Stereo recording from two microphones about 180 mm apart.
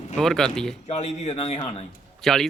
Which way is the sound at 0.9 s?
40° left (ahead or behind).